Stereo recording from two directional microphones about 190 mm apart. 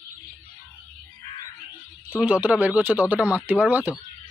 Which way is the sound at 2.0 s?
5° right (ahead or behind).